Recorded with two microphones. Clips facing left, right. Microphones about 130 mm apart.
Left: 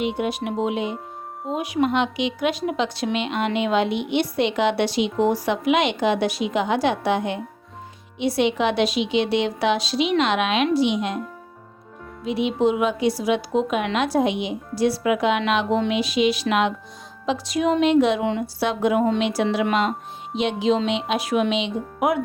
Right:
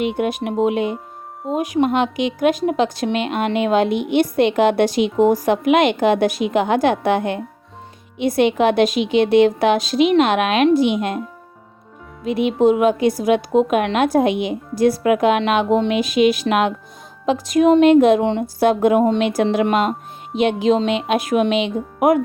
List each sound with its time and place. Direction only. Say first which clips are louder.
0.0 s a woman's voice: right 4 dB; 55° right (ahead or behind)
12.2 s a woman's voice: right 5 dB; 50° right (ahead or behind)